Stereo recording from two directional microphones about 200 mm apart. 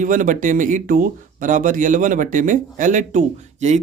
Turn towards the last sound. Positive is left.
turn(degrees=-35)  # may be behind; listen again after turning